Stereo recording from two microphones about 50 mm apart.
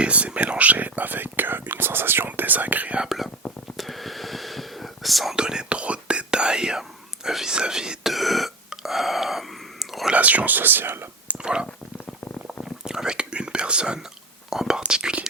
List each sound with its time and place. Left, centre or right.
0.0 s speech: right
3.4 s a sound: centre
3.8 s whispering: centre
5.4 s whispering: centre
8.1 s whispering: centre
10.1 s whispering: right
11.3 s a sound: centre
12.8 s whispering: centre